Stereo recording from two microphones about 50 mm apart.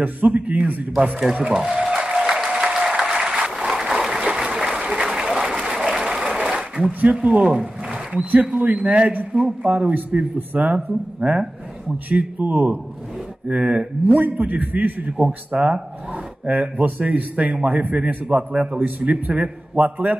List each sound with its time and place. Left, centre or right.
0.0 s a man's voice: right
1.5 s speech: centre
2.1 s applause: centre
6.9 s a man's voice: right
9.7 s a man's voice: right
15.5 s speech: centre
16.1 s a sound: right
16.8 s a man's voice: right
18.9 s a man's voice: right